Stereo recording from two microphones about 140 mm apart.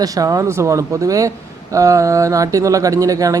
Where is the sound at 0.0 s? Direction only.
25° right (ahead or behind).